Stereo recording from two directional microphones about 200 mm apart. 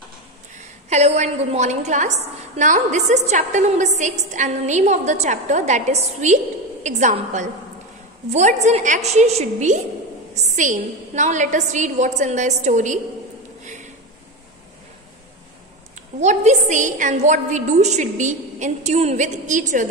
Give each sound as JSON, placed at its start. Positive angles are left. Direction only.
{"t": 0.8, "sound": "a woman's voice", "side_deg": -35}
{"t": 16.2, "sound": "a woman's voice", "side_deg": -35}